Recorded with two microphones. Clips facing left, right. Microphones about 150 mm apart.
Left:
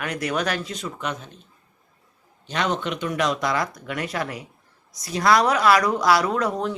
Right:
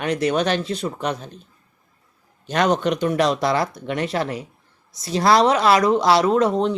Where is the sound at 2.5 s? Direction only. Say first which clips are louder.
Right 6 dB; 45° right (ahead or behind).